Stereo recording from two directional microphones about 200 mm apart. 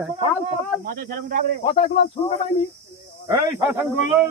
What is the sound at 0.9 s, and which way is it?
Speech, 45° right (ahead or behind).